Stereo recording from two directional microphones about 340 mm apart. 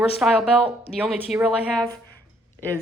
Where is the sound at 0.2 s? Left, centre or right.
Centre.